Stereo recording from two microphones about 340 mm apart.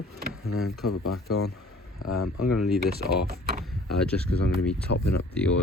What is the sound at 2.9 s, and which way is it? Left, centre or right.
Speech, right.